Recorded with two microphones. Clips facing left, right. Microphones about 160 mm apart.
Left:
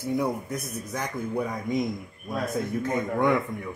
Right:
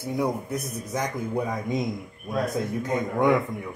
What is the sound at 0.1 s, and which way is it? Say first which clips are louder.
Speech: right 1 dB; 15° right (ahead or behind).